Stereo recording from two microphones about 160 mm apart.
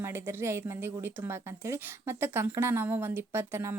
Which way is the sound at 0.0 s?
15° right (ahead or behind).